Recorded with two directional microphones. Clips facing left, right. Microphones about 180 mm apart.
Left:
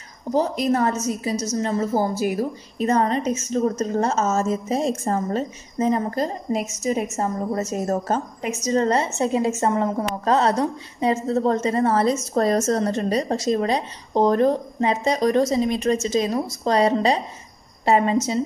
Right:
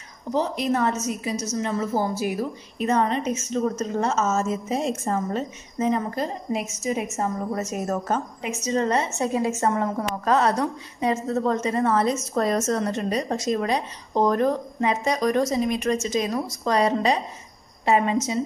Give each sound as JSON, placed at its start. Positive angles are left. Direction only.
{"t": 0.3, "sound": "a woman's voice", "side_deg": 40}